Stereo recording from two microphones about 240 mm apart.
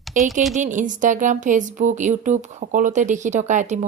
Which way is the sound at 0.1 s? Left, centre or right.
Right.